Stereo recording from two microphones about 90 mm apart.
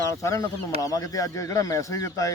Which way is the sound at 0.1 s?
35° left (ahead or behind).